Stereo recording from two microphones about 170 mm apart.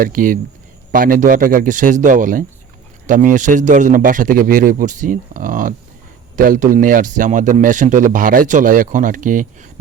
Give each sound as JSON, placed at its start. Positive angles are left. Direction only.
{"t": 0.0, "sound": "a man's voice", "side_deg": -55}